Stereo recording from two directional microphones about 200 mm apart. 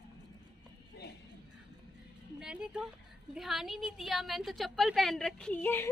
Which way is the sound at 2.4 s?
5° right (ahead or behind).